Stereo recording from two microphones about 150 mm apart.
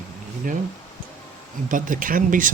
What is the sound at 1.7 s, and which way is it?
Speech, 60° right (ahead or behind).